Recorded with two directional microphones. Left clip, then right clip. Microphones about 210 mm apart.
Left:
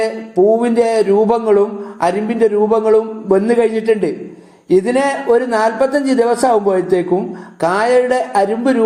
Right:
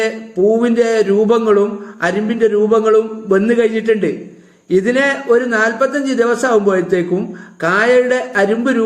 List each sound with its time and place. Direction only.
0.6 s a man's voice: 15° left (ahead or behind)